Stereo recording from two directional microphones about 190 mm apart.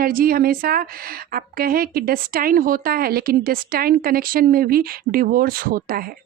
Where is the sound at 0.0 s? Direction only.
50° right (ahead or behind).